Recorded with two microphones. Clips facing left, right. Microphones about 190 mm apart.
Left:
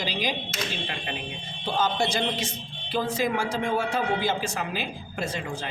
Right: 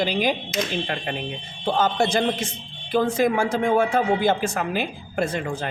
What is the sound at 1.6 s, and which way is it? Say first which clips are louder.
A woman's voice: right 4 dB; 55° right (ahead or behind).